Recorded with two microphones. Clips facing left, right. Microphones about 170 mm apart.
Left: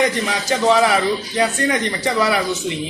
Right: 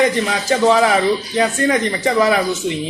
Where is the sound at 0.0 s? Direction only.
30° right (ahead or behind).